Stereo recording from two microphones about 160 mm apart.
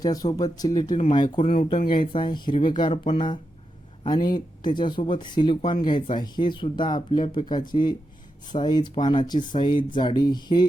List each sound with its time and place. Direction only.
0.0 s speech: 25° left (ahead or behind)